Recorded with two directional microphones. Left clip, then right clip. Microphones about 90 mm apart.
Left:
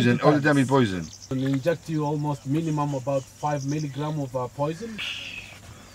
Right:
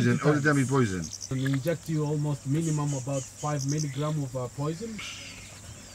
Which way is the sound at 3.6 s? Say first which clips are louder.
Left 2 dB; 35° right (ahead or behind).